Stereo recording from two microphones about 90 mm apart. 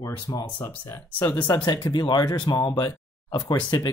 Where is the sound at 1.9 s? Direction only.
55° left (ahead or behind).